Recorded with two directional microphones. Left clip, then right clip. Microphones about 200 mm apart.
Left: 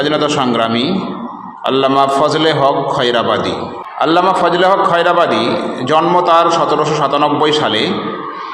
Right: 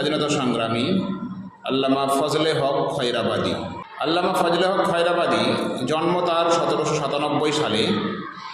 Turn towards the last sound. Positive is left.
turn(degrees=15)  # may be behind; listen again after turning